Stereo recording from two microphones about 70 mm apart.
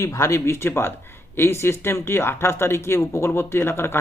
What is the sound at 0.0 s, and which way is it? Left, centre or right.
A man's voice, left.